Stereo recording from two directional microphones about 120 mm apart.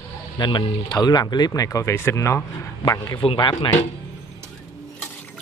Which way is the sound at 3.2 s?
40° left (ahead or behind).